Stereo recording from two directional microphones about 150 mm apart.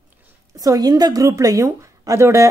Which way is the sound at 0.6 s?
25° right (ahead or behind).